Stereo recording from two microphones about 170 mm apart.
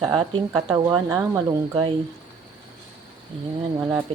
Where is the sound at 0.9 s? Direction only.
20° right (ahead or behind).